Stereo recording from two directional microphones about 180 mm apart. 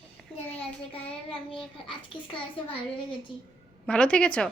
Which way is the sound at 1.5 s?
30° left (ahead or behind).